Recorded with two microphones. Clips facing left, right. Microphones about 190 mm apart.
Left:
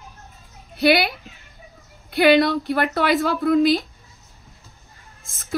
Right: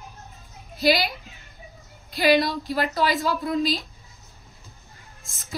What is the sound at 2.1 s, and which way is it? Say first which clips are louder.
A woman's voice: left 5 dB; 60° left (ahead or behind).